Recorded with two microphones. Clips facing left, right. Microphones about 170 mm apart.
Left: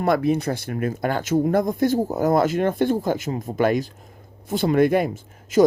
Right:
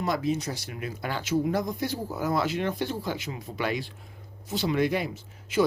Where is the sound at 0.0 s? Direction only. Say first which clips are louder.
Left 7 dB; 60° left (ahead or behind).